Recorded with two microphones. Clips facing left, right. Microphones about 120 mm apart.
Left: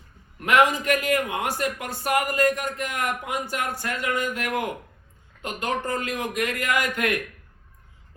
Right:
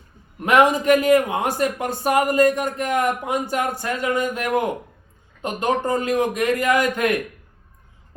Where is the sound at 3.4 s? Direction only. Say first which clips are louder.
Right 5 dB; 25° right (ahead or behind).